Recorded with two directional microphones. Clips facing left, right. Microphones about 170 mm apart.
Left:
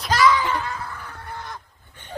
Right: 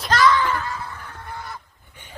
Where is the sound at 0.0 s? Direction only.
5° left (ahead or behind).